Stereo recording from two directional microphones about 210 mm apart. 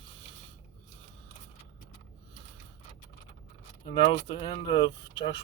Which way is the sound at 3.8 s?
20° left (ahead or behind).